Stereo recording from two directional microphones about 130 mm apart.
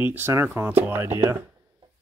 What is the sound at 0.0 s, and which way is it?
Speech, 15° right (ahead or behind).